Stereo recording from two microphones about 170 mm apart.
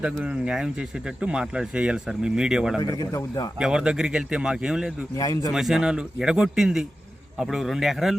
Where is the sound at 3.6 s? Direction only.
5° right (ahead or behind).